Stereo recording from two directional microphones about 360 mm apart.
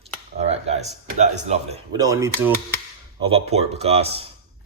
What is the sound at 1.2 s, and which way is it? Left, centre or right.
Speech, centre.